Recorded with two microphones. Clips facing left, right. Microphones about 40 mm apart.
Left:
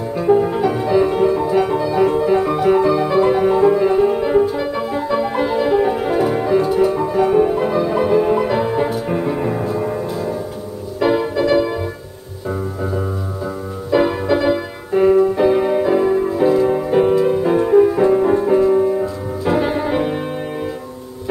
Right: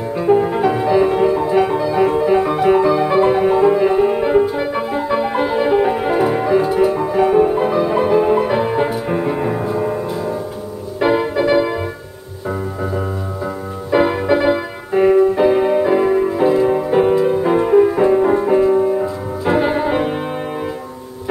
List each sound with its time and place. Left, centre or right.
0.1 s music: right
11.0 s music: right
13.8 s music: right